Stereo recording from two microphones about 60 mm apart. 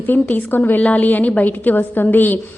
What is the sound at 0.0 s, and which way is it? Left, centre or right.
A woman's voice, left.